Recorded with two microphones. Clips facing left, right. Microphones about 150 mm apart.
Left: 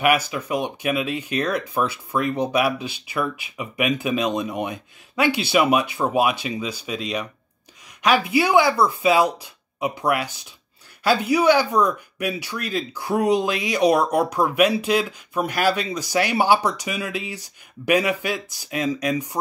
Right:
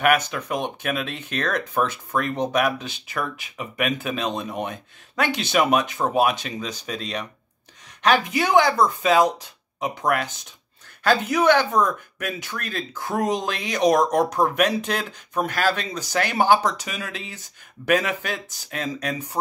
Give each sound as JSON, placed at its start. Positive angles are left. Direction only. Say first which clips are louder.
{"t": 0.0, "sound": "speech", "louder": "even", "side_deg": 10}